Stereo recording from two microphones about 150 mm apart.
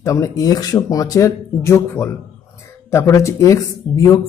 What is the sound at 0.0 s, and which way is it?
Speech, 20° left (ahead or behind).